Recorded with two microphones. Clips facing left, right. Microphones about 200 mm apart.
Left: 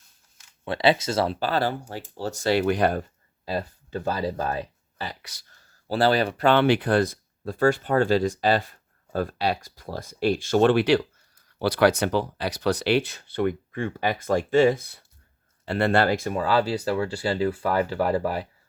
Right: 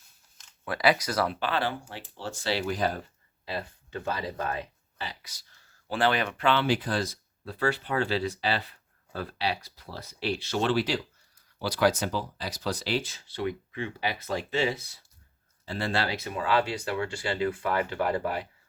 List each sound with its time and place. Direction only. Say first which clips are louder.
0.6 s speech: left 4 dB; 25° left (ahead or behind); by 2.6 s 45° left (ahead or behind)
2.6 s speech: left 7 dB; 65° left (ahead or behind)
3.4 s speech: left 6 dB; 40° left (ahead or behind)
5.2 s speech: left 6 dB; 65° left (ahead or behind)
5.5 s speech: left 6 dB; 40° left (ahead or behind)